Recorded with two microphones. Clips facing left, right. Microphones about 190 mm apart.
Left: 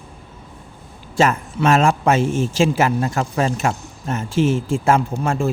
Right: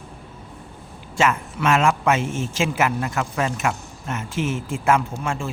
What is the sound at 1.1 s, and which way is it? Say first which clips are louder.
A man's voice: left 4 dB; 35° left (ahead or behind).